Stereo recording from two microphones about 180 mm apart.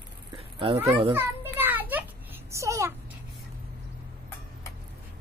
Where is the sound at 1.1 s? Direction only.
10° right (ahead or behind).